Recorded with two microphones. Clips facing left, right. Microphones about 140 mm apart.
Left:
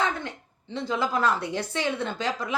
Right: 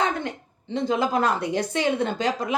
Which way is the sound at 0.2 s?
20° right (ahead or behind).